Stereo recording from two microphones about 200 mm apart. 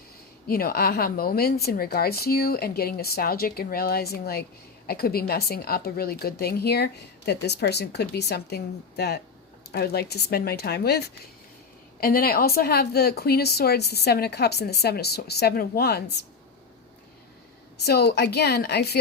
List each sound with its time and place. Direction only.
0.4 s a woman's voice: 50° left (ahead or behind)
17.8 s a woman's voice: 55° left (ahead or behind)